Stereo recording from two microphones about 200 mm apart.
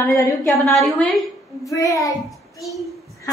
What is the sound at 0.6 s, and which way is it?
Speech, centre (ahead or behind).